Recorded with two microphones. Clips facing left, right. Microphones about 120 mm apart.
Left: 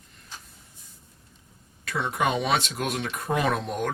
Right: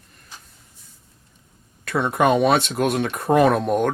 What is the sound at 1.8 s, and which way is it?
Speech, 55° right (ahead or behind).